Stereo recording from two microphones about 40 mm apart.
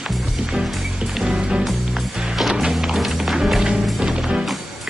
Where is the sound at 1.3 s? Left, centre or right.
Right; by 3.3 s centre.